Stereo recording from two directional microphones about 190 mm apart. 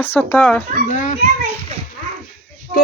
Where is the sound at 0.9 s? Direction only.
40° left (ahead or behind).